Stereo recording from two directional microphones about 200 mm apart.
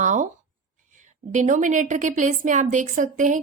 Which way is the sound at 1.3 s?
40° right (ahead or behind).